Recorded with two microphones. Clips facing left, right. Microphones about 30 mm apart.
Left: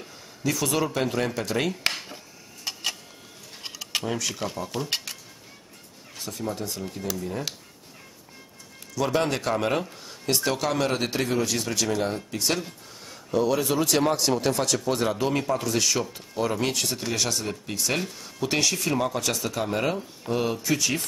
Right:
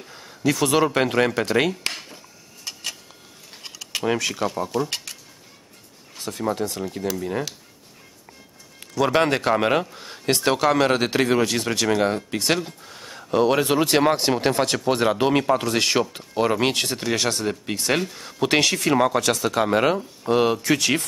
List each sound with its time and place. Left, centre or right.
0.5 s speech: right
2.6 s a sound: centre
4.0 s speech: right
4.8 s speech: centre
6.3 s speech: right
6.8 s speech: right
8.9 s speech: right
9.9 s speech: right
10.9 s speech: right
18.1 s speech: right
20.6 s speech: right